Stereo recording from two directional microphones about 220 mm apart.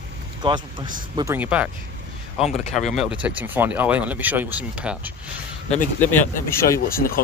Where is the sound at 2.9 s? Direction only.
5° right (ahead or behind).